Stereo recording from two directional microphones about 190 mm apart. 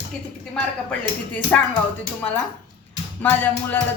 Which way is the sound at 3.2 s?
10° left (ahead or behind).